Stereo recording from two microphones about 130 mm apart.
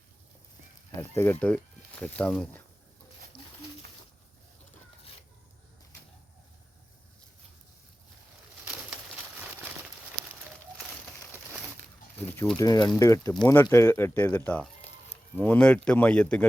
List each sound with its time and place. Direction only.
0.9 s speech: 20° left (ahead or behind)
8.6 s bird: 10° right (ahead or behind)
12.5 s speech: 30° left (ahead or behind); by 16.5 s 10° left (ahead or behind)